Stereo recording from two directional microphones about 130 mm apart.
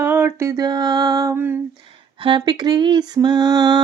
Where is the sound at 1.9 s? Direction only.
40° right (ahead or behind).